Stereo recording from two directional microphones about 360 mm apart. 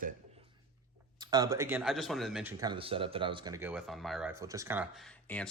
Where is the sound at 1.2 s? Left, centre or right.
Centre.